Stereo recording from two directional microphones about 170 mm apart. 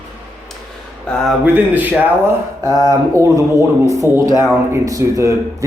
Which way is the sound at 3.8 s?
15° right (ahead or behind).